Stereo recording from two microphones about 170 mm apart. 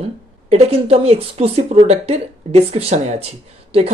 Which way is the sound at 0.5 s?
35° right (ahead or behind).